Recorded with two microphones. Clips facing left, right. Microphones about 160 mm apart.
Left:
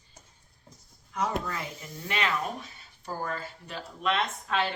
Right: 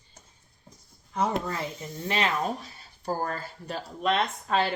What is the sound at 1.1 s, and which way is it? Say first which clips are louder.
Speech: right 3 dB; 25° right (ahead or behind).